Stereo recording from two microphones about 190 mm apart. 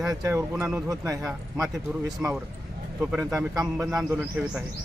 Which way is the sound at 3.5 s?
20° right (ahead or behind).